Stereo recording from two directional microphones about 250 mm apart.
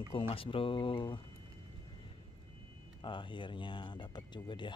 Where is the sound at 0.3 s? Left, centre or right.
Left.